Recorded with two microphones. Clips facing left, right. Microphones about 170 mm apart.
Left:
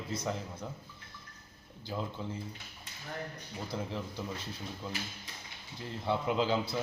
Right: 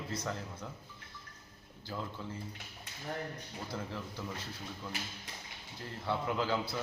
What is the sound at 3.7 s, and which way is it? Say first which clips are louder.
Speech: left 4 dB; 20° left (ahead or behind).